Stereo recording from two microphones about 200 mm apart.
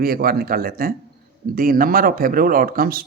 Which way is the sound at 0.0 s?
50° right (ahead or behind).